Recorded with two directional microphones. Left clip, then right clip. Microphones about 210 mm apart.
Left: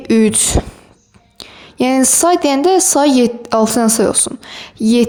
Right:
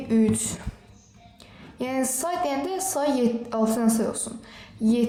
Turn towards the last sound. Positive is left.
turn(degrees=50)  # may be behind; listen again after turning